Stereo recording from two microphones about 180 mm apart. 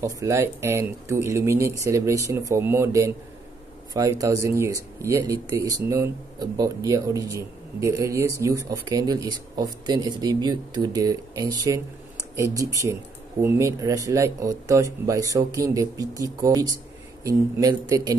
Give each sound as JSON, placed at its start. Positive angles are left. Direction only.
{"t": 0.0, "sound": "speech", "side_deg": -15}